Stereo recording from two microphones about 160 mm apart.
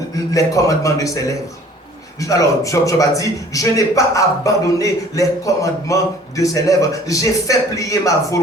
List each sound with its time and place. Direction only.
0.3 s a man's voice: 20° left (ahead or behind)